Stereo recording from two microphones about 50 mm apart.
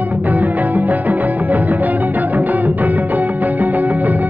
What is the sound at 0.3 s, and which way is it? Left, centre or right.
Music, right.